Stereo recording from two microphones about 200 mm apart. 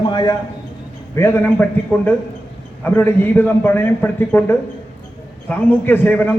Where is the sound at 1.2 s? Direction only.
10° left (ahead or behind).